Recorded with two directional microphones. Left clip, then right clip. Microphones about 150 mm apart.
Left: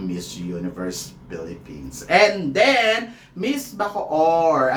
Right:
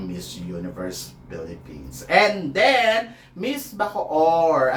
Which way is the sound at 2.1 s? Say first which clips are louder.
Left 1 dB; 15° left (ahead or behind).